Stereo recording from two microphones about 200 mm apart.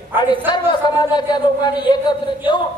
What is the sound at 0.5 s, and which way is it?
A man's voice, 20° left (ahead or behind).